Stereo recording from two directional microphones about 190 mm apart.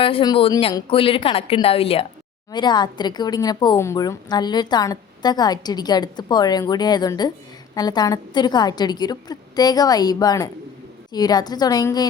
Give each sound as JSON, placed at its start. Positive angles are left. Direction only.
{"t": 0.0, "sound": "a woman's voice", "side_deg": 25}